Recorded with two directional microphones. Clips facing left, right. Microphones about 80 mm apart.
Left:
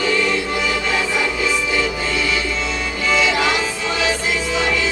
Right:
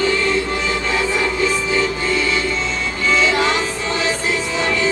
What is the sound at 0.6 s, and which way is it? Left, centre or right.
Music, right.